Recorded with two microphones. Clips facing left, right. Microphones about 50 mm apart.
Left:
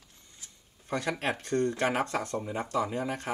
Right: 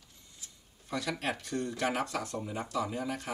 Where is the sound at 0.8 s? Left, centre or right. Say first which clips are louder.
Left 3 dB; left.